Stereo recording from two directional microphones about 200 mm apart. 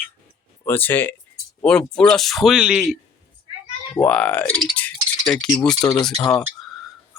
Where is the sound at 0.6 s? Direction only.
10° left (ahead or behind).